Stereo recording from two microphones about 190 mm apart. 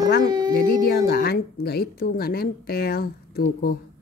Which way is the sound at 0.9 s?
55° left (ahead or behind).